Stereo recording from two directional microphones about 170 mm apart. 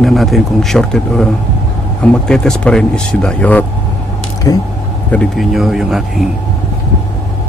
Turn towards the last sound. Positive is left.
turn(degrees=0)  # may be behind; listen again after turning